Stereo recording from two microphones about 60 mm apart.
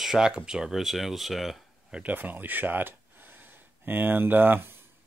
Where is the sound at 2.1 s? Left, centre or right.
Right.